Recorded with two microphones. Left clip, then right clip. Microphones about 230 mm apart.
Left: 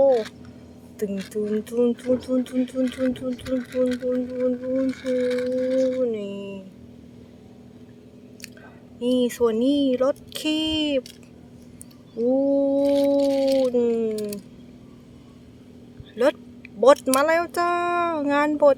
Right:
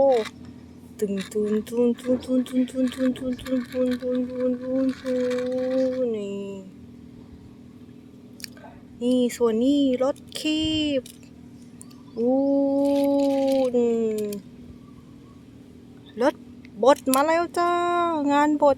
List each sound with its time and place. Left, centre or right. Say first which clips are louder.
0.1 s speech: left 1 dB; centre
9.0 s speech: left 1 dB; centre
12.5 s speech: left 2 dB; centre
13.0 s a sound: left 2 dB; centre
13.7 s speech: even; centre
16.2 s speech: left 2 dB; centre